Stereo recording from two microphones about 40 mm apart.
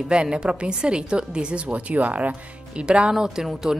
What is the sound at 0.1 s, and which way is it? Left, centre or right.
Speech, right.